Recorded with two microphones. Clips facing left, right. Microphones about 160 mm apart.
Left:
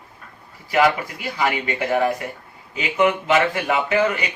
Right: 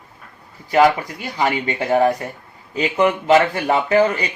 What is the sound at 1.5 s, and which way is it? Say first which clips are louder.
Speech: right 3 dB; 30° right (ahead or behind).